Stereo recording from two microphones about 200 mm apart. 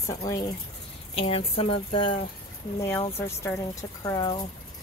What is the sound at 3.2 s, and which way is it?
Speech, 15° left (ahead or behind).